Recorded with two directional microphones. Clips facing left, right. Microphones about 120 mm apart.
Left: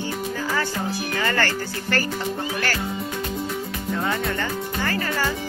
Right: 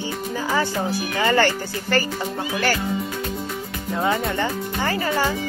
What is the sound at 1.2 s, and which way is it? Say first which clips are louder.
Speech: right 6 dB; 20° right (ahead or behind).